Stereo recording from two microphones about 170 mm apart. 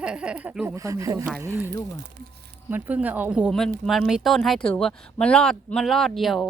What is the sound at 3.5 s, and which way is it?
Speech, centre (ahead or behind).